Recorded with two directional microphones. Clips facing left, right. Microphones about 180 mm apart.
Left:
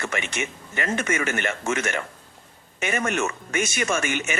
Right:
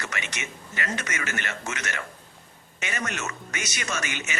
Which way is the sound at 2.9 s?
50° left (ahead or behind).